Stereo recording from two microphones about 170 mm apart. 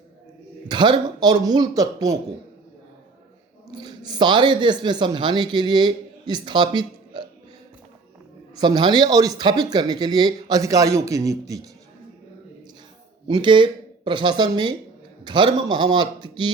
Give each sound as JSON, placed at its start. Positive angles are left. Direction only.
{"t": 0.7, "sound": "speech", "side_deg": -25}
{"t": 3.8, "sound": "speech", "side_deg": -25}
{"t": 8.5, "sound": "speech", "side_deg": -25}
{"t": 13.2, "sound": "speech", "side_deg": -30}